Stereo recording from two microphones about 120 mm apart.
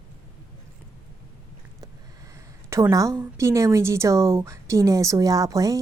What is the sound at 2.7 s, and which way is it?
A woman's voice, 30° right (ahead or behind).